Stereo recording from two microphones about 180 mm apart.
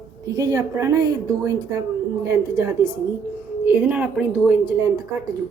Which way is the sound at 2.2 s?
15° right (ahead or behind).